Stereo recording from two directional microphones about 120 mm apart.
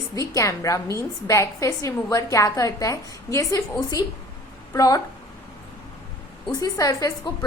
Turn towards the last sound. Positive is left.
turn(degrees=30)  # may be behind; listen again after turning